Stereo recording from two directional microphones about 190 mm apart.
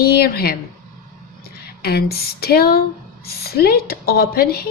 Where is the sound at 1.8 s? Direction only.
55° left (ahead or behind).